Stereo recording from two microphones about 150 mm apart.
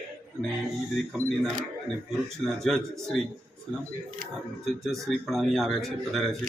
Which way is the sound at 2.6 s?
5° left (ahead or behind).